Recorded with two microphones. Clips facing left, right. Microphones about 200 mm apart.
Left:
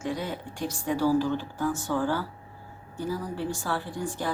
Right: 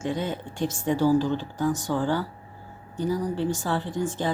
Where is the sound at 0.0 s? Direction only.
25° right (ahead or behind).